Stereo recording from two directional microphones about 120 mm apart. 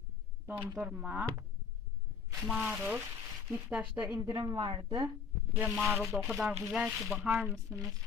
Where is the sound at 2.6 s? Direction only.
10° right (ahead or behind).